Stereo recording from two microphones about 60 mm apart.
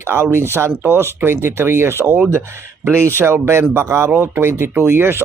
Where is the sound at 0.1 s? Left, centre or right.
Right.